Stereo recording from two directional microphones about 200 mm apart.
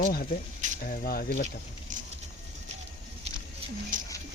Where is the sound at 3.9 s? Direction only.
40° right (ahead or behind).